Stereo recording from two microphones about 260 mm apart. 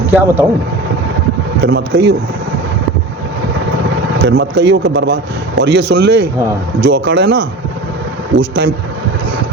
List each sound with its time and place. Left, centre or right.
0.1 s speech: centre
1.6 s a man's voice: right
4.3 s a man's voice: right